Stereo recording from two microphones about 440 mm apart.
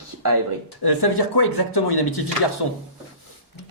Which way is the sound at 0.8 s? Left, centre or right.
Left.